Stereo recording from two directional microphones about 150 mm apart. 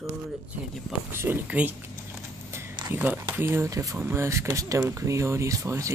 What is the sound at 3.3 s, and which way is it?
Speech, 15° right (ahead or behind).